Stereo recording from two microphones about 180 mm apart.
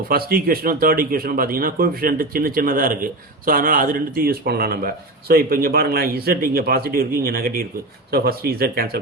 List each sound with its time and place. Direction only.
0.1 s speech: 55° right (ahead or behind)